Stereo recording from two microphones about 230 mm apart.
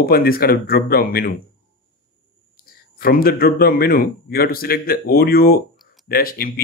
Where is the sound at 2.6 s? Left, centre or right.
Left.